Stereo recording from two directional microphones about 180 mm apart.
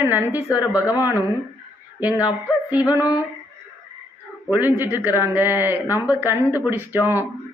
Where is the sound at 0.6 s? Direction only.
20° left (ahead or behind).